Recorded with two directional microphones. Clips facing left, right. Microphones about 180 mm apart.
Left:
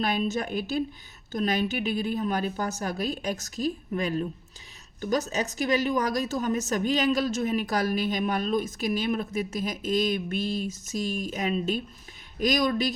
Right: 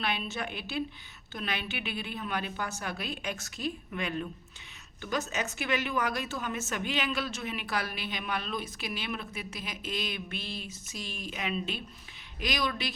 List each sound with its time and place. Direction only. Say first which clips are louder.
0.0 s a woman's voice: left 7 dB; 40° left (ahead or behind)